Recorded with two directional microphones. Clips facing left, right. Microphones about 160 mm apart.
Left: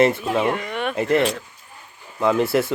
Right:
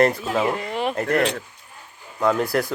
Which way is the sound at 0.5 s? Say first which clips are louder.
Even; 30° right (ahead or behind).